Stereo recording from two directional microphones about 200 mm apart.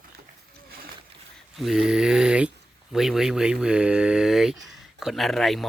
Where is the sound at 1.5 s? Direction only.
Centre (ahead or behind).